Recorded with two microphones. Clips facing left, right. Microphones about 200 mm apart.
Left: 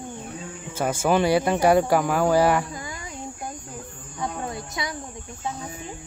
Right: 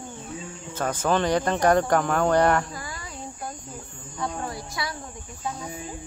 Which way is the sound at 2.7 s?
20° left (ahead or behind).